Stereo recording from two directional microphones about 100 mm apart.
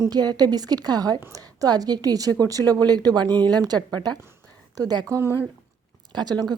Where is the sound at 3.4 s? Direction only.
40° right (ahead or behind).